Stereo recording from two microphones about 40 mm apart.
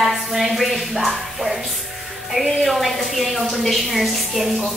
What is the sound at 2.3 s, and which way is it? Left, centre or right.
A woman's voice, centre.